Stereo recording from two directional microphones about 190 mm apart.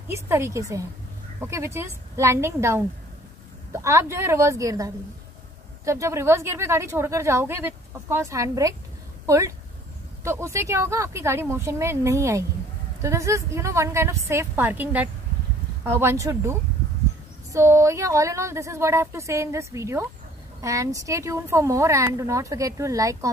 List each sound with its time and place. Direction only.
0.1 s a woman's voice: 15° right (ahead or behind)